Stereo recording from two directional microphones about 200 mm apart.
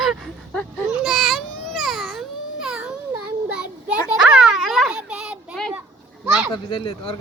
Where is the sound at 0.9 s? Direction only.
Centre (ahead or behind).